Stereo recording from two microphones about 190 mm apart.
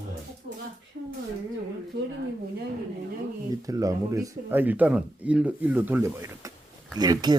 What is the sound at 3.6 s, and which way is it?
Speech, 20° right (ahead or behind).